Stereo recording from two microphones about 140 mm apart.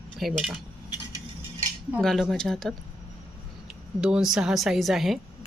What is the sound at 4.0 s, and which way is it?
Speech, 5° right (ahead or behind).